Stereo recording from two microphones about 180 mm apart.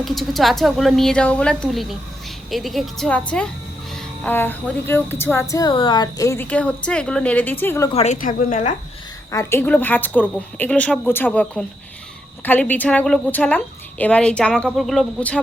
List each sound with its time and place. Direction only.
0.0 s speech: centre (ahead or behind)
3.9 s cricket: 5° left (ahead or behind)
7.9 s a woman's voice: 40° left (ahead or behind)
9.3 s cricket: 15° left (ahead or behind)
14.0 s speech: 5° left (ahead or behind)